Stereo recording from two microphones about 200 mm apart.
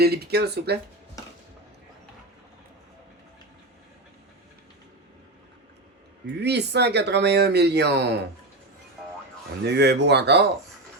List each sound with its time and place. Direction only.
0.0 s speech: 55° right (ahead or behind)
6.4 s speech: 55° right (ahead or behind)
9.6 s speech: 55° right (ahead or behind)